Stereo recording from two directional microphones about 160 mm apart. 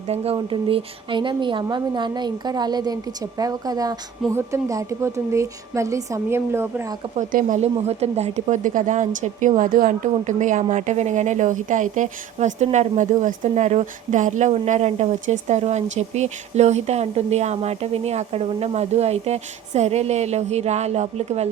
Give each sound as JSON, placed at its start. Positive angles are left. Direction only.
{"t": 0.3, "sound": "a woman's voice", "side_deg": -30}
{"t": 7.2, "sound": "speech", "side_deg": -50}